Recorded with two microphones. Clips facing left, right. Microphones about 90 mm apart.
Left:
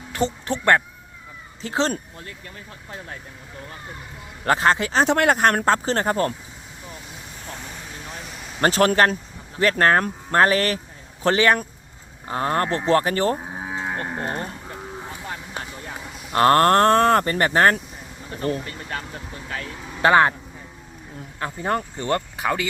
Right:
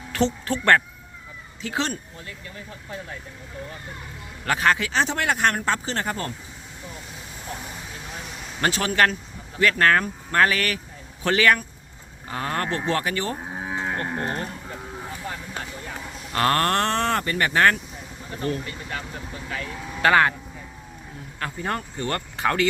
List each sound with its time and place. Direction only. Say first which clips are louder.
0.4 s speech: left 1 dB; 20° left (ahead or behind)
1.6 s speech: left 4 dB; 30° left (ahead or behind)
4.4 s speech: left 3 dB; 30° left (ahead or behind)
5.0 s speech: left 5 dB; 50° left (ahead or behind)
8.6 s speech: left 6 dB; 45° left (ahead or behind)
9.6 s speech: left 1 dB; 35° left (ahead or behind)
13.3 s livestock: left 1 dB; 10° left (ahead or behind)
16.3 s speech: left 6 dB; 30° left (ahead or behind)
20.0 s speech: left 2 dB; 25° left (ahead or behind)
21.3 s speech: left 4 dB; 20° left (ahead or behind)
22.4 s speech: right 2 dB; 10° left (ahead or behind)